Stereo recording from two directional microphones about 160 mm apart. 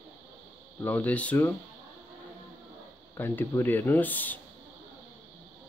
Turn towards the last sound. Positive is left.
turn(degrees=10)  # may be behind; listen again after turning